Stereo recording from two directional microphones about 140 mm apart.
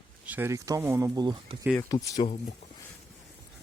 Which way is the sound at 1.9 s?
25° left (ahead or behind).